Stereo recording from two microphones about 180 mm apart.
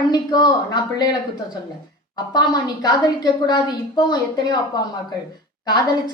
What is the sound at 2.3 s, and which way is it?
A woman's voice, 20° left (ahead or behind).